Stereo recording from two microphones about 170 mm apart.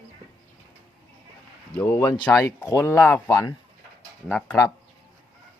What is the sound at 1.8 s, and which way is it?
Speech, 10° left (ahead or behind).